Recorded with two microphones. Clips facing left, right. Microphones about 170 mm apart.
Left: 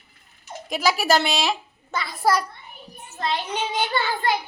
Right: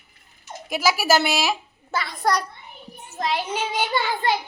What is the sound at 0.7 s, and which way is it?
A child's voice, 5° right (ahead or behind).